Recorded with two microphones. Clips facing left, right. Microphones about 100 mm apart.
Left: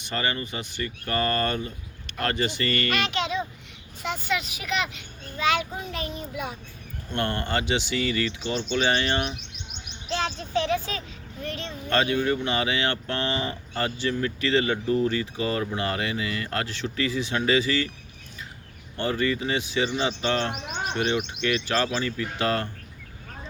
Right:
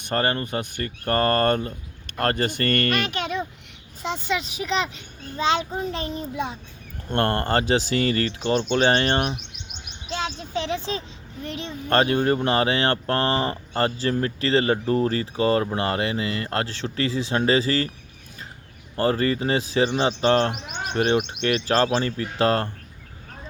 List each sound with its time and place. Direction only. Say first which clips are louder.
0.0 s speech: right 5 dB; 50° right (ahead or behind)
4.0 s speech: right 2 dB; 25° right (ahead or behind)
7.1 s speech: right 5 dB; 45° right (ahead or behind)
10.1 s a sound: left 1 dB; 5° right (ahead or behind)
10.5 s a woman's voice: left 2 dB; 20° right (ahead or behind)
11.9 s speech: right 4 dB; 45° right (ahead or behind)
18.9 s speech: right 4 dB; 35° right (ahead or behind)